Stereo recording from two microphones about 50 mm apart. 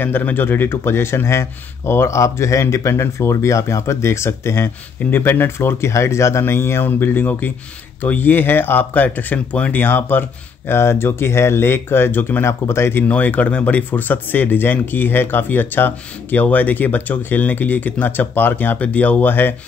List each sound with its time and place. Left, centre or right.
0.0 s a man's voice: left
5.1 s a man's voice: left
6.4 s speech: left
10.7 s speech: left
12.4 s a man's voice: left
13.1 s speech: left